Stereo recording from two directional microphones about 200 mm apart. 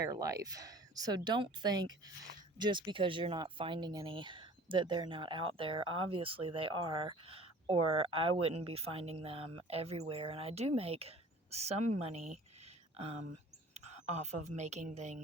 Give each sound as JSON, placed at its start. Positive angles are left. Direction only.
{"t": 0.0, "sound": "a woman's voice", "side_deg": -15}
{"t": 13.7, "sound": "speech", "side_deg": -35}